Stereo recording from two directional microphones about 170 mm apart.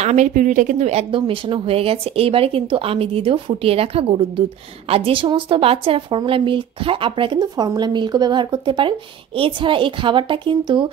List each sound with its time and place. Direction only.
0.0 s speech: 40° right (ahead or behind)